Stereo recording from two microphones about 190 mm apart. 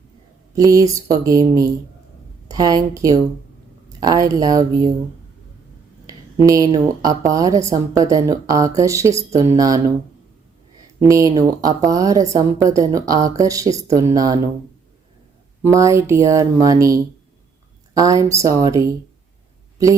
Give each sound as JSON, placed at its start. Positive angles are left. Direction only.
{"t": 0.5, "sound": "speech", "side_deg": -20}
{"t": 6.1, "sound": "a sound", "side_deg": -20}
{"t": 6.7, "sound": "speech", "side_deg": -20}
{"t": 11.1, "sound": "speech", "side_deg": -15}
{"t": 15.6, "sound": "a woman's voice", "side_deg": -15}